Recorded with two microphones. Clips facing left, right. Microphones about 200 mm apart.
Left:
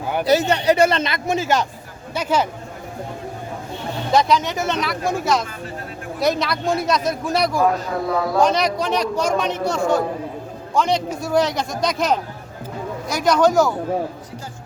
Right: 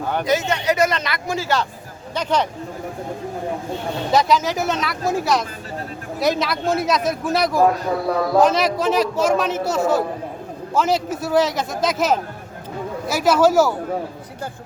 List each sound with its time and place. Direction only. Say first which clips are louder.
0.3 s speech: left 5 dB; 35° left (ahead or behind); by 1.6 s 20° left (ahead or behind)
2.1 s speech: even; 5° left (ahead or behind)
4.1 s a man's voice: even; centre (ahead or behind)